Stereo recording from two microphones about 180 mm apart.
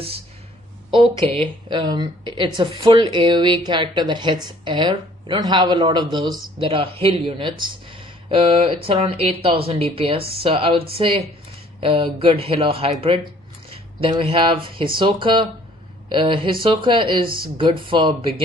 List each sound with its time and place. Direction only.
1.1 s a woman's voice: 30° right (ahead or behind)
17.2 s speech: 55° right (ahead or behind)
17.7 s a woman's voice: 30° right (ahead or behind)